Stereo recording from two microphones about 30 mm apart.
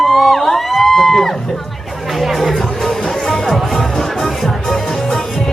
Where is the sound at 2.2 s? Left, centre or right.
Centre.